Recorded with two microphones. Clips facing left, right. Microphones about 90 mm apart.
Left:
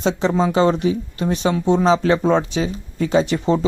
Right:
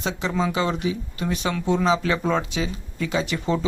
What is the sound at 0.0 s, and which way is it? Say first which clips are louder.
Speech: left 6 dB; 30° left (ahead or behind).